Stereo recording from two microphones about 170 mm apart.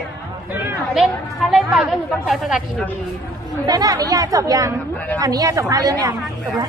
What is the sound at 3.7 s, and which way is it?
Speech, 20° right (ahead or behind).